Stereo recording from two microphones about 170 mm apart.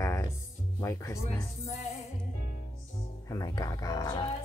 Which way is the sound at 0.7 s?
15° left (ahead or behind).